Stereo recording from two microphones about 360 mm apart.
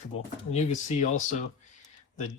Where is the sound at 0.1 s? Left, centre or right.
Centre.